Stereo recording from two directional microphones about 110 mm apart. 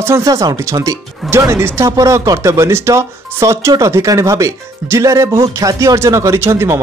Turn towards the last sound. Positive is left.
turn(degrees=-20)  # may be behind; listen again after turning